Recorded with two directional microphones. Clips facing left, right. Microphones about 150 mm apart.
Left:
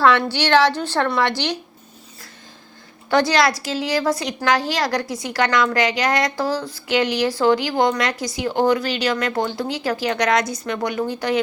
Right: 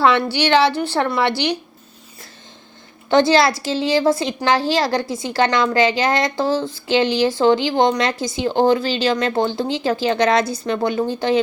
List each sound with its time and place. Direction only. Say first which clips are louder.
0.0 s speech: right 1 dB; 15° right (ahead or behind)
3.1 s a woman's voice: right 3 dB; 25° right (ahead or behind)